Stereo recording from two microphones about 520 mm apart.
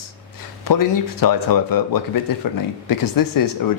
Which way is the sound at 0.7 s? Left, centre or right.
Left.